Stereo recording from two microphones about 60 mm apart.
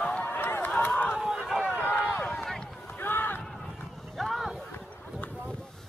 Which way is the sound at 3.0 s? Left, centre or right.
Left.